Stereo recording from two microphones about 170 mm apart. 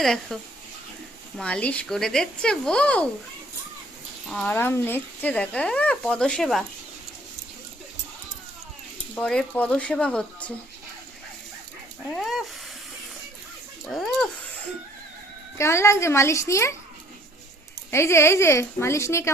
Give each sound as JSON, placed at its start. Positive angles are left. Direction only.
{"t": 0.0, "sound": "speech", "side_deg": 0}
{"t": 1.4, "sound": "speech", "side_deg": 5}
{"t": 4.3, "sound": "speech", "side_deg": 5}
{"t": 9.1, "sound": "speech", "side_deg": 5}
{"t": 12.0, "sound": "speech", "side_deg": 0}
{"t": 13.8, "sound": "speech", "side_deg": 0}
{"t": 15.5, "sound": "speech", "side_deg": 15}
{"t": 17.9, "sound": "speech", "side_deg": 15}